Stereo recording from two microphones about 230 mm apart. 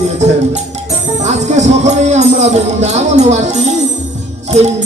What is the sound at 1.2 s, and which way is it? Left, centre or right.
Speech, right.